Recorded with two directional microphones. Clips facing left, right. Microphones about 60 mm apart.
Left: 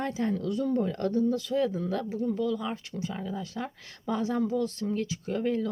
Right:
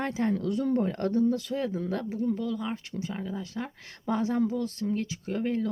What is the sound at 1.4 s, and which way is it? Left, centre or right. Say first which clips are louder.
Speech: left 3 dB; right.